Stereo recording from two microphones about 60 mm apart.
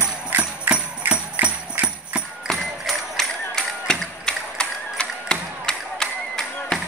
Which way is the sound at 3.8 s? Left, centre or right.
Centre.